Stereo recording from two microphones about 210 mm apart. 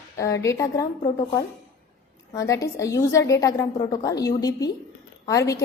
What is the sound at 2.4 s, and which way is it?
A woman's voice, 15° left (ahead or behind).